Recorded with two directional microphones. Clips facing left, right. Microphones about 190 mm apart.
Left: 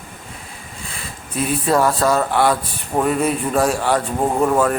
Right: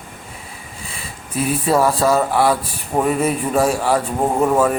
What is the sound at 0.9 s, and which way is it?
Speech, 5° right (ahead or behind).